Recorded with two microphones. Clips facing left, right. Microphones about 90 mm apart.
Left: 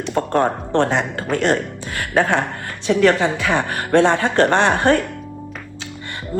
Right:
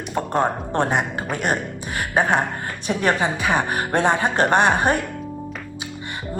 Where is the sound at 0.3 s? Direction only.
15° right (ahead or behind).